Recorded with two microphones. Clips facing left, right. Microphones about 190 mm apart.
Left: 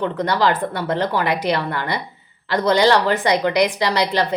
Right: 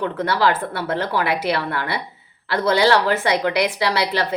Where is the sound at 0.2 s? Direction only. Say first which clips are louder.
Even; 5° right (ahead or behind).